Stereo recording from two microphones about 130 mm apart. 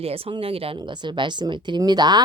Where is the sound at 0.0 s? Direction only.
50° right (ahead or behind).